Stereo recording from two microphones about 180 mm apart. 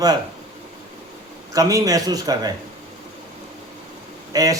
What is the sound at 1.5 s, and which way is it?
A man's voice, 20° right (ahead or behind).